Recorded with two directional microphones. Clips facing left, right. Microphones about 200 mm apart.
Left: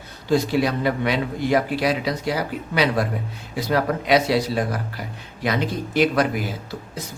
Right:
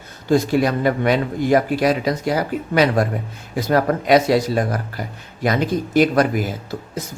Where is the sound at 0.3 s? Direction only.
45° right (ahead or behind).